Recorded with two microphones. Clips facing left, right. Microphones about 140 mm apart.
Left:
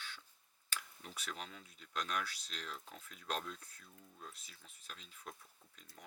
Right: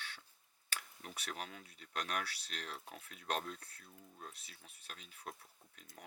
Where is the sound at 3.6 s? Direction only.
65° right (ahead or behind).